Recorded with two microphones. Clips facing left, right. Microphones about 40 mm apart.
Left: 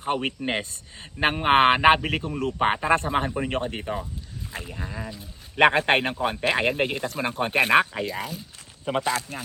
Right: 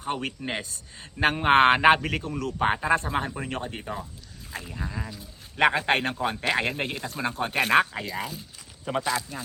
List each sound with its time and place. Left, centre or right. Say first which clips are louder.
0.0 s speech: left 4 dB; left
3.2 s speech: left 5 dB; centre
3.5 s speech: left 5 dB; left
4.6 s speech: right 1 dB; centre
5.5 s speech: left 3 dB; left
6.0 s speech: left 2 dB; centre
7.2 s speech: left 3 dB; left; by 8.4 s centre
8.8 s a man's voice: left 2 dB; left